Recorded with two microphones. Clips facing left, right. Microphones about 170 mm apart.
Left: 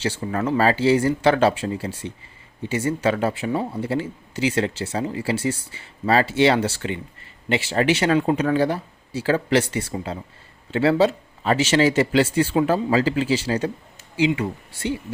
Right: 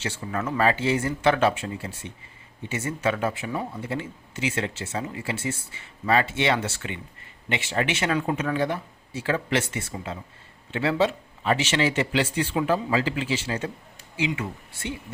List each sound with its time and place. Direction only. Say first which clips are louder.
0.0 s speech: left 6 dB; 35° left (ahead or behind)